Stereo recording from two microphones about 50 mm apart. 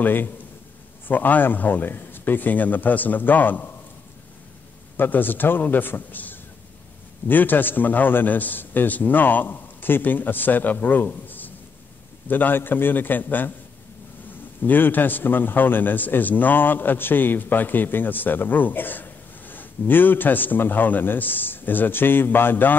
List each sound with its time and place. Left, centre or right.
0.0 s a man's voice: left
4.9 s a man's voice: left
11.2 s a sound: left
12.3 s a man's voice: left
14.6 s a man's voice: left